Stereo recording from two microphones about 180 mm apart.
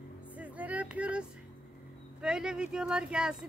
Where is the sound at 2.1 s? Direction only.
5° right (ahead or behind).